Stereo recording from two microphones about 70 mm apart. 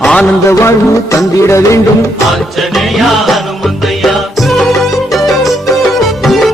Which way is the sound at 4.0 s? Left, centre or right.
Centre.